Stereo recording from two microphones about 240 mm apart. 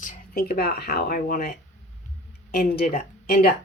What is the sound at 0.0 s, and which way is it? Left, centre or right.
Speech, left.